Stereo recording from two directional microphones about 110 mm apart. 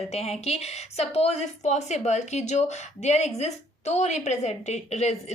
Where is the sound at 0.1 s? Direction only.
75° left (ahead or behind).